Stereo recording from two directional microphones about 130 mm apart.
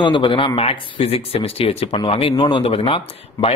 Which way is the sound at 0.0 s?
40° left (ahead or behind).